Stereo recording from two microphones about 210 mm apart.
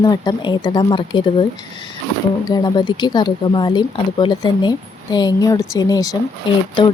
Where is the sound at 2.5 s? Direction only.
20° left (ahead or behind).